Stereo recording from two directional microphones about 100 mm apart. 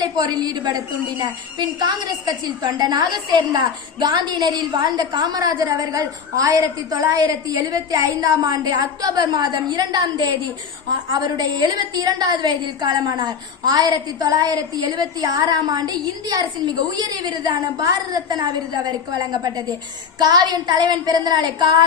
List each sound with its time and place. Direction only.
0.0 s a woman's voice: 40° right (ahead or behind)